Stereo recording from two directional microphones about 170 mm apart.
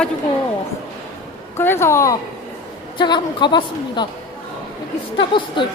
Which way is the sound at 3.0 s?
25° left (ahead or behind).